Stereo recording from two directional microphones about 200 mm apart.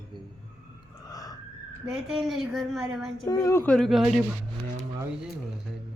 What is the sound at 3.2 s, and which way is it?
Speech, 15° left (ahead or behind).